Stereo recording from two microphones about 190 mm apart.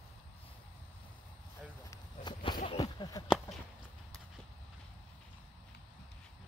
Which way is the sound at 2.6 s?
20° left (ahead or behind).